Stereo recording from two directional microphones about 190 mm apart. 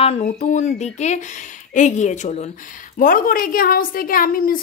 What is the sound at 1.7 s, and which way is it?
A woman's voice, 40° left (ahead or behind).